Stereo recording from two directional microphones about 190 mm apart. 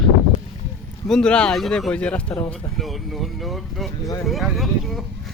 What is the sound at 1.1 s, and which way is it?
Speech, 5° left (ahead or behind).